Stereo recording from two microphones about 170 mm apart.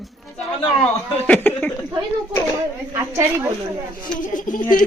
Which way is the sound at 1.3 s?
10° left (ahead or behind).